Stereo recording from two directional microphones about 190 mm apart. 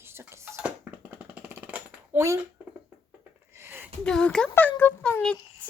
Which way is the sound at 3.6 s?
10° right (ahead or behind).